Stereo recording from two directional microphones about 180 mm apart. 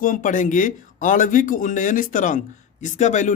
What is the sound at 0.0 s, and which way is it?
Speech, 50° left (ahead or behind).